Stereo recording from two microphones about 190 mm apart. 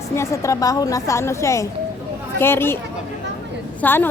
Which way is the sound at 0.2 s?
15° left (ahead or behind).